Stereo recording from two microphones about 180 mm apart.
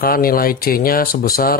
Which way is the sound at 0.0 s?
55° left (ahead or behind).